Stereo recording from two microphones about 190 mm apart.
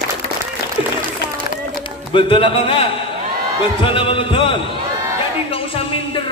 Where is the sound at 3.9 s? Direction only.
30° left (ahead or behind).